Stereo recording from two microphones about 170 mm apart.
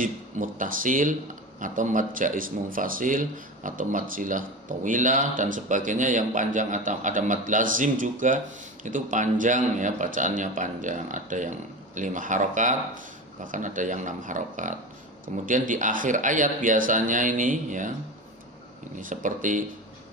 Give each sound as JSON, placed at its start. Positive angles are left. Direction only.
{"t": 0.0, "sound": "speech", "side_deg": -50}
{"t": 18.9, "sound": "speech", "side_deg": -50}